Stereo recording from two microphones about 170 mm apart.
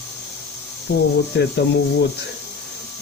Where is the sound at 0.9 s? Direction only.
70° left (ahead or behind).